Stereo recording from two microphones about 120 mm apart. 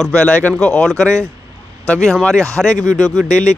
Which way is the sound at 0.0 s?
10° left (ahead or behind).